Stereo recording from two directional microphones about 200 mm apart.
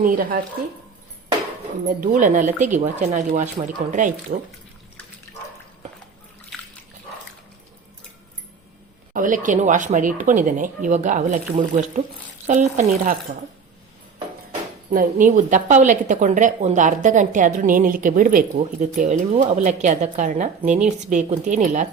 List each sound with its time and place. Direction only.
0.0 s speech: 45° right (ahead or behind)
2.0 s a woman's voice: 40° right (ahead or behind)
9.1 s a woman's voice: 40° right (ahead or behind)
14.8 s a woman's voice: 40° right (ahead or behind)